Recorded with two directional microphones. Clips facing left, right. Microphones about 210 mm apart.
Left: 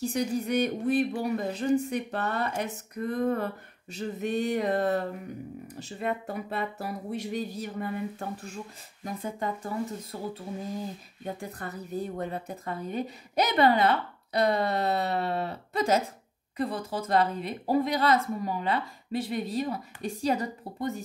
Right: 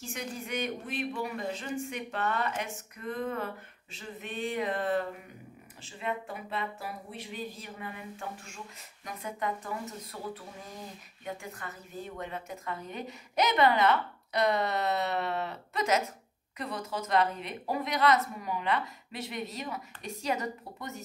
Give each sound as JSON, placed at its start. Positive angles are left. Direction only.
{"t": 0.0, "sound": "a woman's voice", "side_deg": 40}
{"t": 11.2, "sound": "a woman's voice", "side_deg": 35}